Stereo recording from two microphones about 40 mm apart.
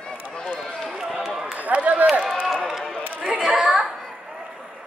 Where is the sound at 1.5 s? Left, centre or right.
Right.